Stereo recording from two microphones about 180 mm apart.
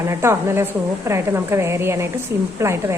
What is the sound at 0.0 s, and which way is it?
A woman's voice, 15° right (ahead or behind).